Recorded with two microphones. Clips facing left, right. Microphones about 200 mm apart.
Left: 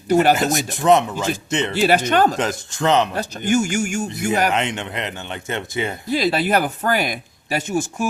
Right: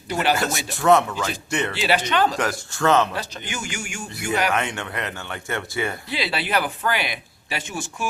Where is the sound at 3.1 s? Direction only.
45° left (ahead or behind).